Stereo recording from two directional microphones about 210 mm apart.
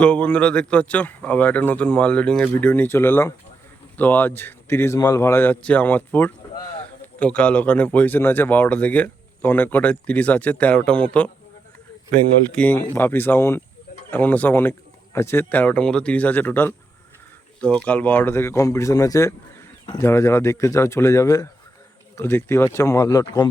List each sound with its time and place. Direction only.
0.0 s a man's voice: 5° left (ahead or behind)
12.5 s speech: 10° left (ahead or behind)